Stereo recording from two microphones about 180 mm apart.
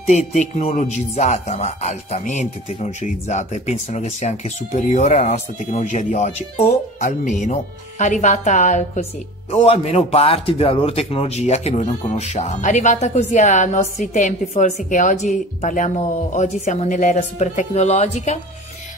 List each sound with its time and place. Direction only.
0.0 s a man's voice: 40° left (ahead or behind)